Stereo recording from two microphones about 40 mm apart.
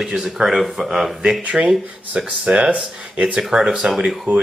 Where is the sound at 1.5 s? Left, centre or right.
Right.